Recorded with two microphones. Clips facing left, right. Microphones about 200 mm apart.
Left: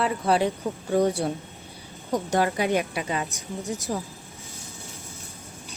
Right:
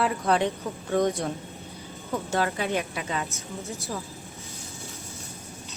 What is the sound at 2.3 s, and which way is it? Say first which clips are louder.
A woman's voice: left 3 dB; 15° left (ahead or behind).